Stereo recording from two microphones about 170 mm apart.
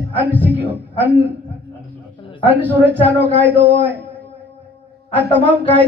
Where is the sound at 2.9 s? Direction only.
10° left (ahead or behind).